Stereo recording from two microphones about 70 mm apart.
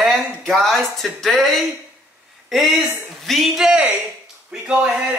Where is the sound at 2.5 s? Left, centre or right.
Centre.